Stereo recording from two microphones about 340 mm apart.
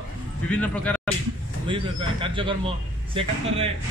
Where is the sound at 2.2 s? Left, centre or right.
Centre.